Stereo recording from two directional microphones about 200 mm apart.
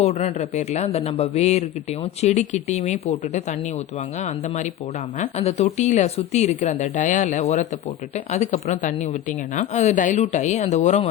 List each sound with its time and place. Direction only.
0.0 s a woman's voice: 35° left (ahead or behind)
5.2 s a woman's voice: 30° left (ahead or behind)